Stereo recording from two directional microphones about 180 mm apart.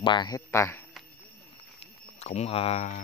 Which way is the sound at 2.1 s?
35° left (ahead or behind).